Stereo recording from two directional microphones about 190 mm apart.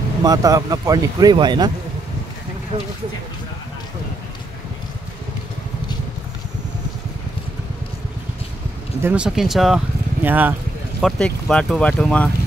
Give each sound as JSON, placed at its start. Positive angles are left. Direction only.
{"t": 0.2, "sound": "speech", "side_deg": -20}
{"t": 9.0, "sound": "speech", "side_deg": -5}
{"t": 11.0, "sound": "speech", "side_deg": 0}